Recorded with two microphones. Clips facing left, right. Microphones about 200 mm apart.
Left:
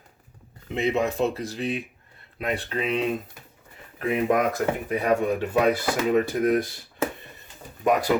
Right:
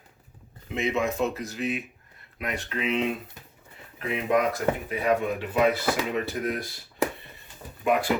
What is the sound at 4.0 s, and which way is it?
Speech, 50° left (ahead or behind).